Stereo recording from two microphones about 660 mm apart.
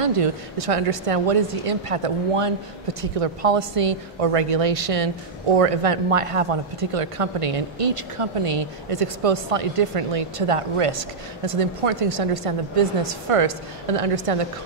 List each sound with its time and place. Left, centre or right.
0.0 s speech: right